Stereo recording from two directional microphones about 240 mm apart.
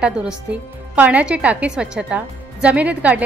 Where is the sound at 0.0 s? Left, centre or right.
Centre.